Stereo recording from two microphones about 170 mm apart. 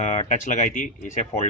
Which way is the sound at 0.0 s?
45° left (ahead or behind).